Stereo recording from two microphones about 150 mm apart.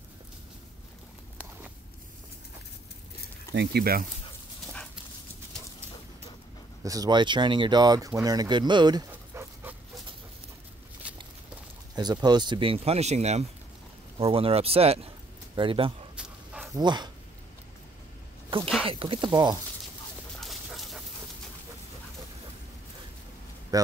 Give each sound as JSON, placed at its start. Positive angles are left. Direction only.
{"t": 3.7, "sound": "speech", "side_deg": -85}
{"t": 6.8, "sound": "speech", "side_deg": -25}
{"t": 11.9, "sound": "speech", "side_deg": -25}
{"t": 16.2, "sound": "a sound", "side_deg": -5}
{"t": 16.7, "sound": "speech", "side_deg": -30}
{"t": 18.5, "sound": "speech", "side_deg": -35}
{"t": 20.3, "sound": "dog", "side_deg": 0}
{"t": 23.7, "sound": "speech", "side_deg": -25}